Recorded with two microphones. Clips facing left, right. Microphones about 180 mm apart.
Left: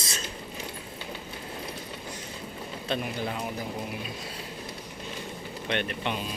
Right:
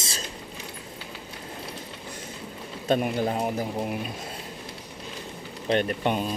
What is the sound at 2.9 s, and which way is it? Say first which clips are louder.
Speech: right 7 dB; 45° right (ahead or behind).